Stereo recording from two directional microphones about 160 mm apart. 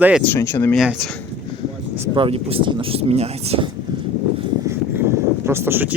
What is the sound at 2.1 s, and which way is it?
Speech, 35° right (ahead or behind).